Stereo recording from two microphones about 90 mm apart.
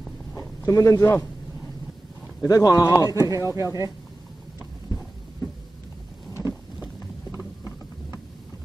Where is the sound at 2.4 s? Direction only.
40° left (ahead or behind).